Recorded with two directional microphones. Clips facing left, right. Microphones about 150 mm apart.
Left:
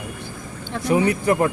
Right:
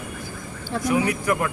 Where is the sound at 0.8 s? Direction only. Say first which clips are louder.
Left 4 dB; 30° left (ahead or behind).